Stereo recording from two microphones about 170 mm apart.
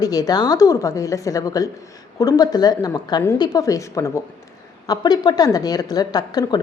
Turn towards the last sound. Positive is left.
turn(degrees=25)  # may be behind; listen again after turning